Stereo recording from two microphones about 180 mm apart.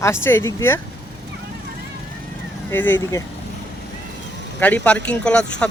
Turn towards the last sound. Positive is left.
turn(degrees=5)  # may be behind; listen again after turning